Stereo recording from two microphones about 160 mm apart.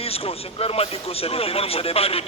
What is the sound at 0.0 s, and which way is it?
Speech, 35° left (ahead or behind).